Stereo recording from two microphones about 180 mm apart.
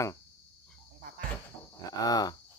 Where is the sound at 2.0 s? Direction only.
20° left (ahead or behind).